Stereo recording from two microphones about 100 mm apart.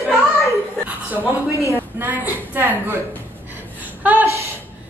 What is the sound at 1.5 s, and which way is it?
Speech, 30° left (ahead or behind).